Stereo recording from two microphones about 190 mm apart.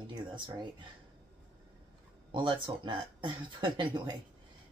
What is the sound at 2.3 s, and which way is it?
Speech, 25° right (ahead or behind).